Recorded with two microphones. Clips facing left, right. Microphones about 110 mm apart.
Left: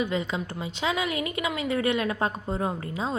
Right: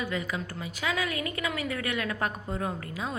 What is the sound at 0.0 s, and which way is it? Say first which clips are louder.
A woman's voice: left 4 dB; 20° left (ahead or behind).